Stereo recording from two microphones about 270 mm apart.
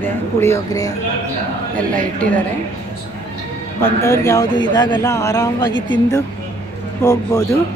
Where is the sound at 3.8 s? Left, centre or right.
Centre.